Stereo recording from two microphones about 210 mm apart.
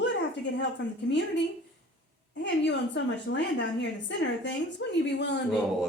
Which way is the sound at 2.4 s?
55° left (ahead or behind).